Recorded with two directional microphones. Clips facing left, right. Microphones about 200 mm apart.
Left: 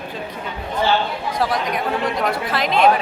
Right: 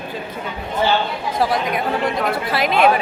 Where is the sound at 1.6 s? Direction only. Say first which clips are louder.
Right 1 dB; 5° right (ahead or behind).